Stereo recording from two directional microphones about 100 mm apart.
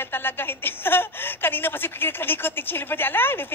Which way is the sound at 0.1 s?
20° left (ahead or behind).